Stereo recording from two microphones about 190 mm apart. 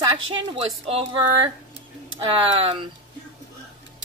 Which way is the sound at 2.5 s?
30° right (ahead or behind).